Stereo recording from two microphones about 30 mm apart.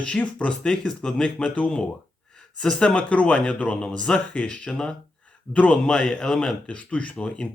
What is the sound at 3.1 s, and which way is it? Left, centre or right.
Speech, left.